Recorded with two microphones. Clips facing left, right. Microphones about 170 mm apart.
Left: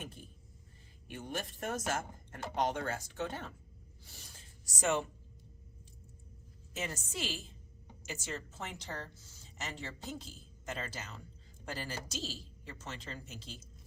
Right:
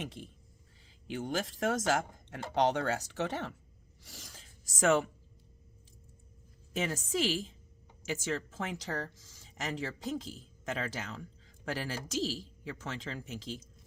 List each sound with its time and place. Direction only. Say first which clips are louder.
0.0 s speech: right 6 dB; 85° right
4.0 s speech: right 5 dB; 90° right
6.7 s speech: right 8 dB; 90° right